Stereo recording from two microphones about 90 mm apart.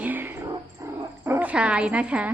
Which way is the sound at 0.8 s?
30° right (ahead or behind).